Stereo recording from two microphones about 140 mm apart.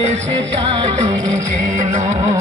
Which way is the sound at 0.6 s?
35° right (ahead or behind).